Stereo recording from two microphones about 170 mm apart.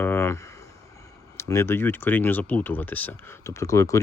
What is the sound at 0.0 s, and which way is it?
Speech, 15° left (ahead or behind).